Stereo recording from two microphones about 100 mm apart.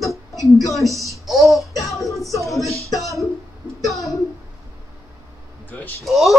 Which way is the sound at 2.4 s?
Centre (ahead or behind).